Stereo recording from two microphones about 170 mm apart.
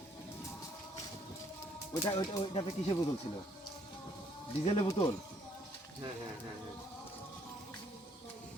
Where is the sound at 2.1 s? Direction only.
25° left (ahead or behind).